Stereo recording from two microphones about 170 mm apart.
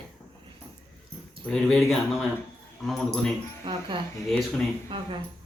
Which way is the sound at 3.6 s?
30° right (ahead or behind).